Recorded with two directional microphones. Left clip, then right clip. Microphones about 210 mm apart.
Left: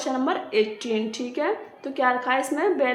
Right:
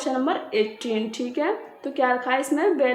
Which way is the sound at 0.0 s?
20° right (ahead or behind).